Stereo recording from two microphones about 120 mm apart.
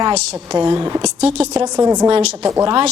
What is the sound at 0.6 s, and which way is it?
Speech, 45° right (ahead or behind).